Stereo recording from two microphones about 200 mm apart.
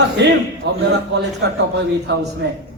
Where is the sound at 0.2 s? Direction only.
60° right (ahead or behind).